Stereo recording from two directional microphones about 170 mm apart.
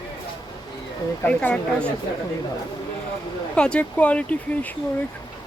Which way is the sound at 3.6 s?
5° left (ahead or behind).